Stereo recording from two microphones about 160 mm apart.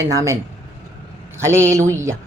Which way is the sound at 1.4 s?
15° right (ahead or behind).